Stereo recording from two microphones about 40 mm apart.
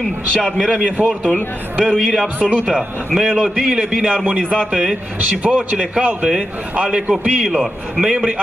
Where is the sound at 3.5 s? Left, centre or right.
Right.